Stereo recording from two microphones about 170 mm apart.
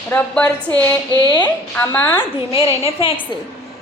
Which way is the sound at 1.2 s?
25° left (ahead or behind).